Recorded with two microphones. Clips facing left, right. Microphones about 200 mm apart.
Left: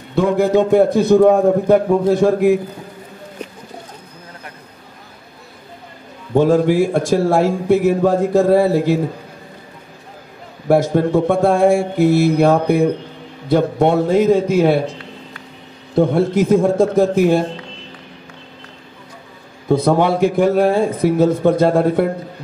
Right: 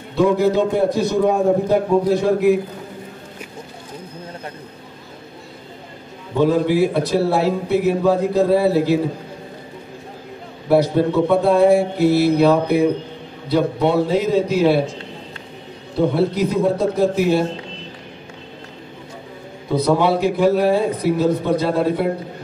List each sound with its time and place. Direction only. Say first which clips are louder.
0.1 s a man's voice: left 1 dB; 50° left (ahead or behind)
6.3 s a man's voice: left 3 dB; 50° left (ahead or behind)
10.7 s a man's voice: left 2 dB; 45° left (ahead or behind)
15.9 s a man's voice: left 3 dB; 50° left (ahead or behind)
19.7 s a man's voice: left 2 dB; 50° left (ahead or behind)